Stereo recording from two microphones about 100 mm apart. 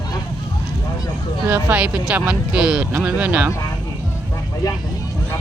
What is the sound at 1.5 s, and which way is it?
Speech, 15° right (ahead or behind).